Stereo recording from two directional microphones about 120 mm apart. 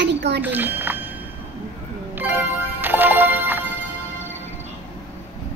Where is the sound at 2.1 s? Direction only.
15° right (ahead or behind).